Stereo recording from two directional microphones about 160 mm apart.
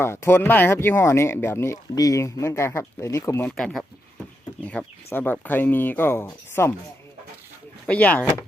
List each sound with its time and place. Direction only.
0.0 s speech: 15° left (ahead or behind)
3.6 s speech: centre (ahead or behind)
7.9 s speech: 10° left (ahead or behind)